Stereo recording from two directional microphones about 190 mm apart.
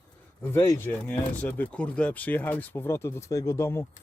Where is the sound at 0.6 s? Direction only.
20° left (ahead or behind).